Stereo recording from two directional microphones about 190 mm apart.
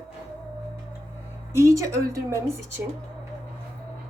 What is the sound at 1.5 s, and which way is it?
A woman's voice, 15° right (ahead or behind).